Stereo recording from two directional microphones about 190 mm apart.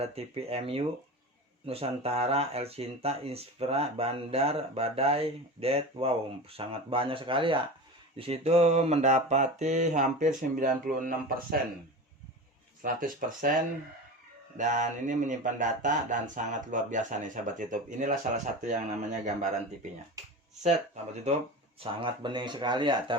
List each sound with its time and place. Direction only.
0.0 s speech: 30° right (ahead or behind)
12.8 s speech: 45° right (ahead or behind)
21.8 s speech: 25° right (ahead or behind)